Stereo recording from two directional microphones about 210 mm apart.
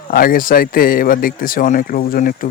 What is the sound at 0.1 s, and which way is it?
Speech, 45° left (ahead or behind).